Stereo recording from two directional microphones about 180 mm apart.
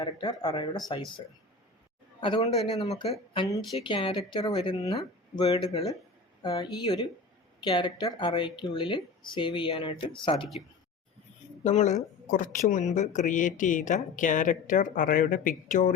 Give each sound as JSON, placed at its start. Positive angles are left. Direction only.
{"t": 0.0, "sound": "speech", "side_deg": 25}
{"t": 2.2, "sound": "speech", "side_deg": 30}
{"t": 11.6, "sound": "speech", "side_deg": 40}